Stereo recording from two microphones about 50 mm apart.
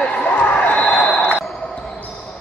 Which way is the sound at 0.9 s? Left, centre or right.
Centre.